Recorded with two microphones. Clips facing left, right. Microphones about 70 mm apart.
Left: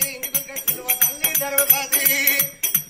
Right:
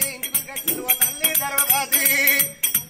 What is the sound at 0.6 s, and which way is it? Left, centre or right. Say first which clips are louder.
Music: right 4 dB; centre.